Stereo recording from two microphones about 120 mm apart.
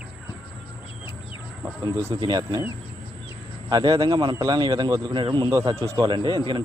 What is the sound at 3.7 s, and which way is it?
A man's voice, 35° right (ahead or behind).